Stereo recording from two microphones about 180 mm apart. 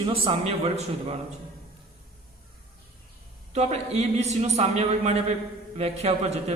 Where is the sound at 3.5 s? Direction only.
35° right (ahead or behind).